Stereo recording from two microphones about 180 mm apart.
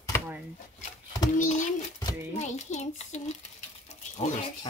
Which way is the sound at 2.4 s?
40° left (ahead or behind).